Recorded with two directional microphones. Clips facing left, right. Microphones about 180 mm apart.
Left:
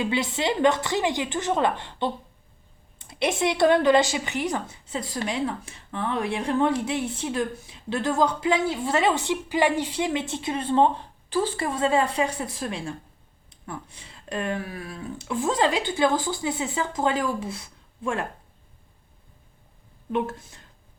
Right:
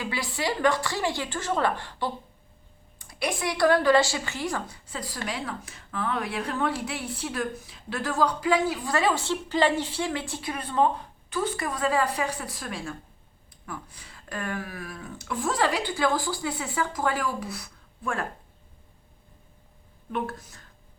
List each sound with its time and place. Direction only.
0.0 s speech: 20° left (ahead or behind)
20.1 s speech: 25° left (ahead or behind)